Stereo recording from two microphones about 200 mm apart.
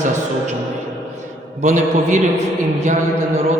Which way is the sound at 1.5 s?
35° right (ahead or behind).